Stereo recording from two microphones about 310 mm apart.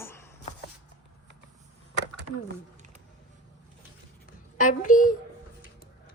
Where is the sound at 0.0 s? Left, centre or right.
Centre.